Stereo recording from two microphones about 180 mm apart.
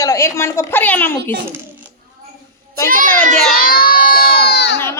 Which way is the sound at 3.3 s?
Centre (ahead or behind).